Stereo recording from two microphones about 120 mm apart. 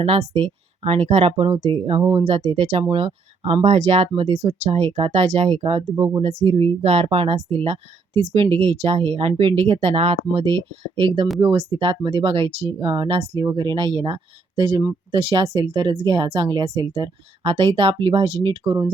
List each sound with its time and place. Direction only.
0.0 s speech: 55° right (ahead or behind)